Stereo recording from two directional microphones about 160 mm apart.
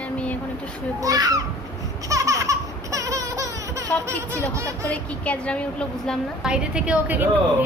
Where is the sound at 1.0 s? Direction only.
20° right (ahead or behind).